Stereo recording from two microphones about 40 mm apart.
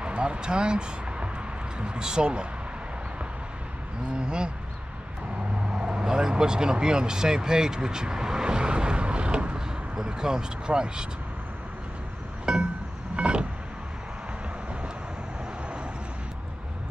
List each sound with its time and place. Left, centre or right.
0.0 s speech: right
4.1 s speech: right
5.7 s speech: right
9.9 s speech: centre
12.5 s music: right
13.1 s power windows: right